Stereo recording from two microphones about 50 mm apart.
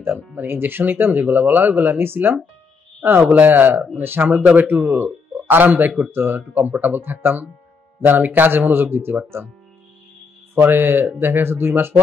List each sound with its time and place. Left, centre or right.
0.5 s speech: right
3.3 s speech: right
4.0 s speech: right
4.3 s speech: right
10.5 s speech: right